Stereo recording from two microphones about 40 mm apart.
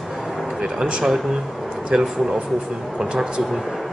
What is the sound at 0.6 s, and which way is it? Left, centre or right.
Speech, right.